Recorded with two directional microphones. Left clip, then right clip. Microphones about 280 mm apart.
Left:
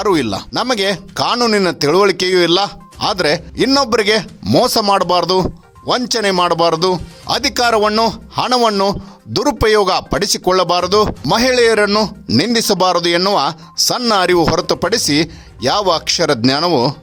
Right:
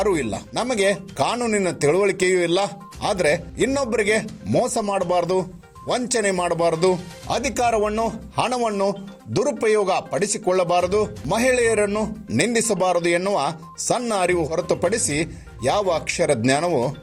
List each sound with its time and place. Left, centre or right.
0.0 s speech: left